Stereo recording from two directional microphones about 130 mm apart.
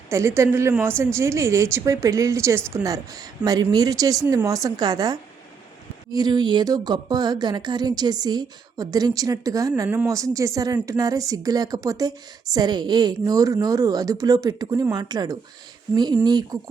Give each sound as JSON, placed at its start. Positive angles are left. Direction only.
{"t": 0.1, "sound": "speech", "side_deg": -20}